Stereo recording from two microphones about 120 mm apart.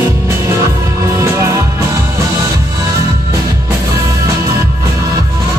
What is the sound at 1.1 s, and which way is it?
Music, 25° right (ahead or behind).